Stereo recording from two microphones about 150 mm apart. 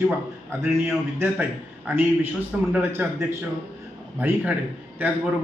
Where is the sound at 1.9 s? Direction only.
15° right (ahead or behind).